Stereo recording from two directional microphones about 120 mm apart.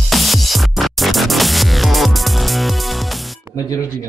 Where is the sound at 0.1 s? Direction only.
Centre (ahead or behind).